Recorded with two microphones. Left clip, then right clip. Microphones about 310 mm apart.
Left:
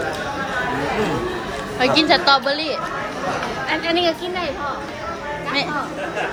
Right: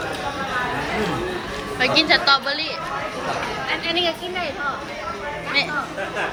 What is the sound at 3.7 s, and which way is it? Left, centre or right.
Speech, left.